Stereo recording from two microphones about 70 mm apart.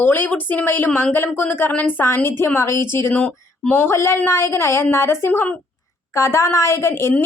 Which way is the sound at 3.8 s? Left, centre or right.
Left.